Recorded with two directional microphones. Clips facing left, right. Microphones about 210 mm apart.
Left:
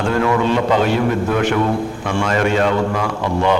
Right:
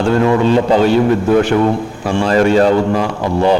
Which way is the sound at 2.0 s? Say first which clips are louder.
Right 6 dB; 35° right (ahead or behind).